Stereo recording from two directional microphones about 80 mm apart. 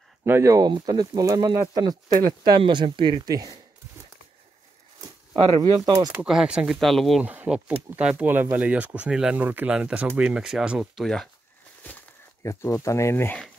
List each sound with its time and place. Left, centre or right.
0.2 s speech: right
0.7 s speech: right
3.3 s speech: right
5.3 s speech: right
6.2 s speech: centre
6.8 s speech: centre
7.2 s speech: centre
8.3 s speech: right
9.7 s speech: centre
12.4 s speech: left